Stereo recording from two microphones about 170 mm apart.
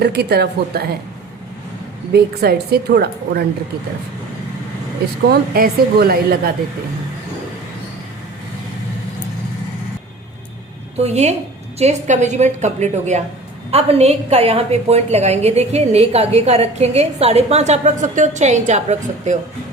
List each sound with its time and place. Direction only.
0.0 s a woman's voice: 70° right (ahead or behind)
2.1 s a woman's voice: 70° right (ahead or behind)
5.3 s a woman's voice: 65° right (ahead or behind)
10.9 s a woman's voice: 40° right (ahead or behind)